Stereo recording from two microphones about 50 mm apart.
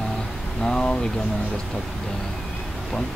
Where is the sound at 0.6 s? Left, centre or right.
Centre.